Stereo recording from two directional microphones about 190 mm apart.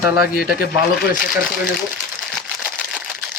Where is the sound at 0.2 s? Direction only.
50° left (ahead or behind).